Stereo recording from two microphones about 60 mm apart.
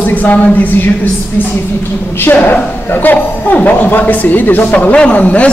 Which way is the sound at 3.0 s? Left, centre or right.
Left.